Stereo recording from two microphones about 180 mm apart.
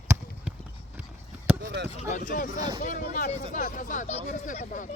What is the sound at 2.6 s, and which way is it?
Speech, 25° right (ahead or behind).